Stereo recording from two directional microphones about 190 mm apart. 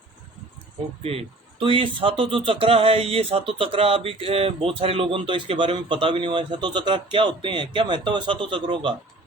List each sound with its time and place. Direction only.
1.0 s speech: 30° right (ahead or behind)